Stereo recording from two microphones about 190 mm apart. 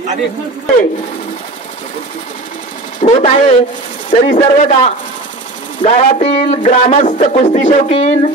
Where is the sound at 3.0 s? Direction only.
35° left (ahead or behind).